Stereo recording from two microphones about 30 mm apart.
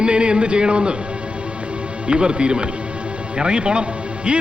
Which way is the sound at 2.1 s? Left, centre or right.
Right.